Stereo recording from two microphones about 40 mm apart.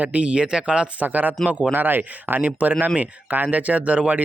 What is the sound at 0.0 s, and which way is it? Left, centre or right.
Speech, right.